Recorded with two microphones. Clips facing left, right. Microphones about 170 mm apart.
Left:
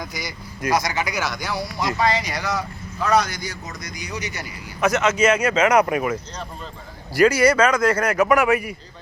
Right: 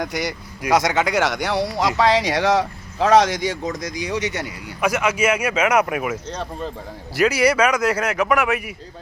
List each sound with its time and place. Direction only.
0.0 s speech: 70° right (ahead or behind); by 4.4 s 90° right
4.8 s a man's voice: 10° right (ahead or behind)
7.2 s a man's voice: 5° right (ahead or behind)